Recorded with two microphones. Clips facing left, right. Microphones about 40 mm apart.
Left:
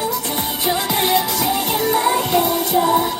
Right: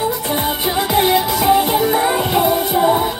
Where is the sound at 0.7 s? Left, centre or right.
Centre.